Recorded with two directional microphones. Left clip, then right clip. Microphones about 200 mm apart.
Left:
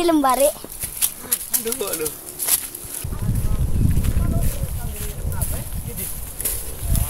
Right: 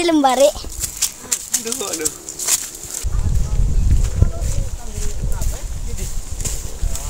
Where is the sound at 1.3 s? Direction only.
10° right (ahead or behind).